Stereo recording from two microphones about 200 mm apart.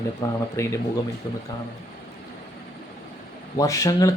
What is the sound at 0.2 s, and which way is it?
Speech, 15° left (ahead or behind).